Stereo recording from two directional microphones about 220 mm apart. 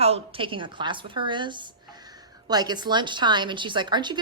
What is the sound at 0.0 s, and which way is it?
A woman's voice, 25° right (ahead or behind).